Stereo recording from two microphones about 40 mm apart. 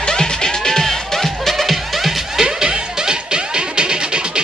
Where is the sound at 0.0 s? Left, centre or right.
Centre.